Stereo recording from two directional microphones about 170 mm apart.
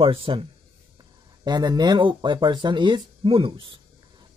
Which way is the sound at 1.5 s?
25° right (ahead or behind).